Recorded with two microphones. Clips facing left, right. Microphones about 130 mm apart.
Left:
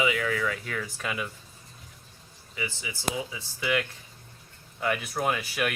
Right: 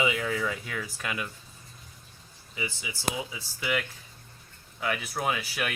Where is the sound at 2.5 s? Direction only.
20° right (ahead or behind).